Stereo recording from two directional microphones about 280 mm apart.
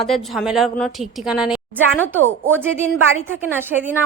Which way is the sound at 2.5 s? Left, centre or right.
Centre.